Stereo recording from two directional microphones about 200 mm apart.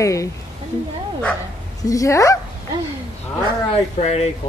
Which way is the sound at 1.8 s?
15° left (ahead or behind).